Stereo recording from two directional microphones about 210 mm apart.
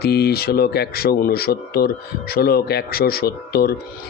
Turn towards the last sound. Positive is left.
turn(degrees=45)  # may be behind; listen again after turning